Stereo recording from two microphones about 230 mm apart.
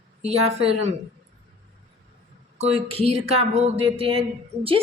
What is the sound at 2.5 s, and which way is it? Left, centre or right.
Speech, right.